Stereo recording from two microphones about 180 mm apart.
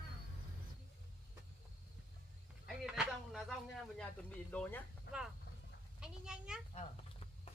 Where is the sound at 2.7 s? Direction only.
5° right (ahead or behind).